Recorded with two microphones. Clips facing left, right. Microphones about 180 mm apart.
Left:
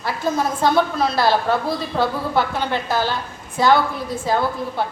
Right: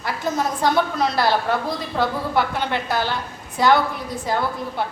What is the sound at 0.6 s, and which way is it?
Speech, 20° right (ahead or behind).